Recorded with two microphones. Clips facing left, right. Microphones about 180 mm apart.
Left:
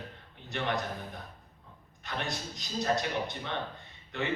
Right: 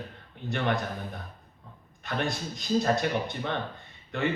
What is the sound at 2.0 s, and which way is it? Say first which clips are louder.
A man's voice: right 6 dB; 50° right (ahead or behind).